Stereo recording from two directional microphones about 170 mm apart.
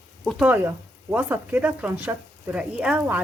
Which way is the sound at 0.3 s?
Centre (ahead or behind).